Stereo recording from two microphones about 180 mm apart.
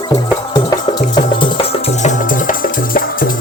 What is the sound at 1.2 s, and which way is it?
Music, 30° left (ahead or behind).